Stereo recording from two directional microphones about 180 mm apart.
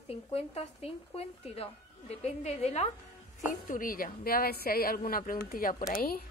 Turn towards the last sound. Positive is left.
turn(degrees=55)  # may be behind; listen again after turning